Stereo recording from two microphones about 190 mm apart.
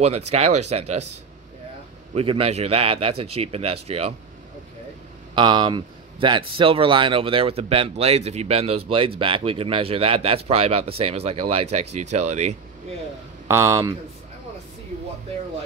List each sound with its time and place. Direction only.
0.0 s a man's voice: 35° right (ahead or behind)
2.1 s a man's voice: 30° right (ahead or behind)
5.3 s a man's voice: 25° right (ahead or behind)
13.5 s speech: 15° right (ahead or behind)